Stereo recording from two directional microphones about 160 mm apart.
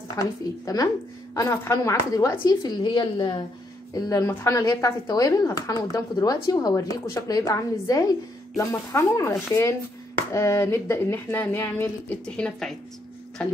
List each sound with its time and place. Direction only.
0.2 s speech: 20° left (ahead or behind)